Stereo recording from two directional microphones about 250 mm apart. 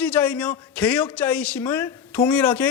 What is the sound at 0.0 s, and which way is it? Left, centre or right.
A man's voice, centre.